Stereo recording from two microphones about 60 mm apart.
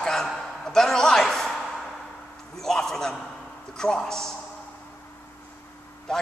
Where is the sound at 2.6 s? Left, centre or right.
Centre.